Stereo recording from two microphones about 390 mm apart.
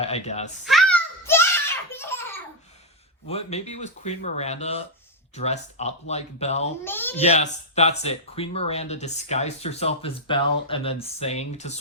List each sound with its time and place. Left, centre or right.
0.0 s speech: centre
0.6 s a sound: centre
1.9 s belly laugh: centre
3.2 s speech: centre
6.8 s speech: centre
7.2 s speech: centre